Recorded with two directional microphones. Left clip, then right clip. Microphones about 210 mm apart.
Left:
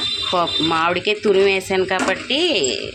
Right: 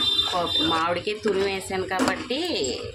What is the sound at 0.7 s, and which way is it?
Speech, 30° left (ahead or behind).